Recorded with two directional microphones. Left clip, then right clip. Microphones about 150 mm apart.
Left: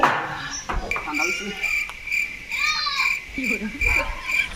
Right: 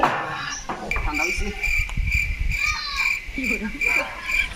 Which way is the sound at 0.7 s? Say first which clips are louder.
Left 1 dB; 45° right (ahead or behind).